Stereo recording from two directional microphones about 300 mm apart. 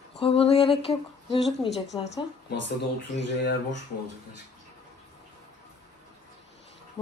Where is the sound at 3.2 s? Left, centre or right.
Left.